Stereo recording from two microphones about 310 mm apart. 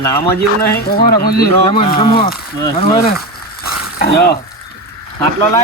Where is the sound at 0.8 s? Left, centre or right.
Left.